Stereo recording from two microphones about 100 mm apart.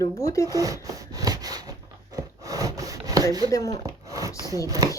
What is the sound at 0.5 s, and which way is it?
Wood, 35° right (ahead or behind).